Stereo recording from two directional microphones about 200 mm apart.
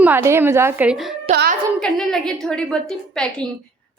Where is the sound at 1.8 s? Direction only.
5° left (ahead or behind).